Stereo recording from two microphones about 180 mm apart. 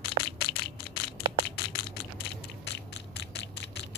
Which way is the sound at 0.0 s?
65° left (ahead or behind).